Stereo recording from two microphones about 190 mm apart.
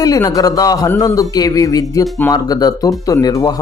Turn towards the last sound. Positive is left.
turn(degrees=20)  # may be behind; listen again after turning